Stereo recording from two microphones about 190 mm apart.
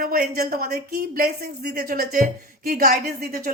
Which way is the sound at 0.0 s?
50° right (ahead or behind).